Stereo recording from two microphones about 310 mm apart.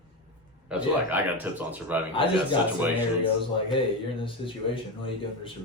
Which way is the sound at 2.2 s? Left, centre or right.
Centre.